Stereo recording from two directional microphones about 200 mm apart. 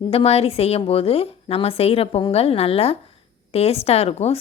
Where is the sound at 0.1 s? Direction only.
30° left (ahead or behind).